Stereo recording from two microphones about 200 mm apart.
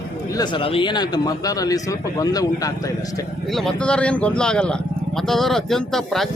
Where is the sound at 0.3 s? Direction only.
25° left (ahead or behind).